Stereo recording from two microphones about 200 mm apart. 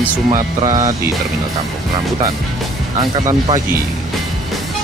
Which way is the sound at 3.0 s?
20° right (ahead or behind).